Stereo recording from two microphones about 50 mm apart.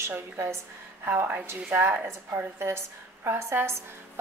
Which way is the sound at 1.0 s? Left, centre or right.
Right.